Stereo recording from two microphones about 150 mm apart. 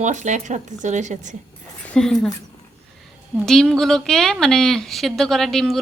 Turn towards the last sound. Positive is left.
turn(degrees=0)  # may be behind; listen again after turning